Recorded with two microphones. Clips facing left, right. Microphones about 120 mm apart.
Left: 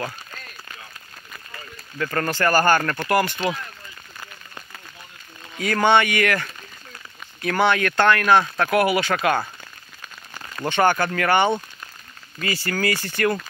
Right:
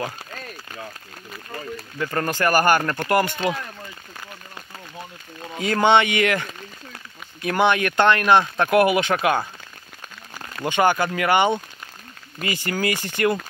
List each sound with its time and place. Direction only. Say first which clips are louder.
2.0 s speech: even; 15° right (ahead or behind)
5.6 s speech: right 1 dB; 20° right (ahead or behind)
7.4 s speech: even; 15° right (ahead or behind)